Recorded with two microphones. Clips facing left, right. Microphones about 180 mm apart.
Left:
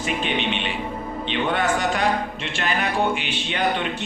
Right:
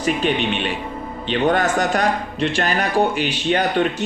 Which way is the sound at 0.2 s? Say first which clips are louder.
Right 5 dB; 40° right (ahead or behind).